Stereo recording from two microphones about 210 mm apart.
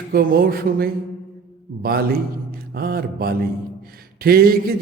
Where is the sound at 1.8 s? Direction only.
45° right (ahead or behind).